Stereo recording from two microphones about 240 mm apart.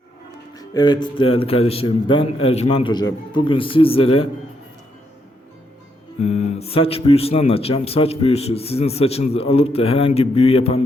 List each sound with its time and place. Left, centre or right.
0.5 s speech: centre
6.1 s speech: left